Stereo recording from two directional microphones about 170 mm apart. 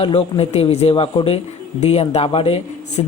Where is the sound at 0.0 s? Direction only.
35° left (ahead or behind).